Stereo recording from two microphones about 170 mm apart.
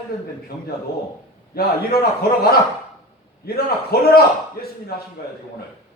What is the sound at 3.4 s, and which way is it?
Speech, 65° left (ahead or behind).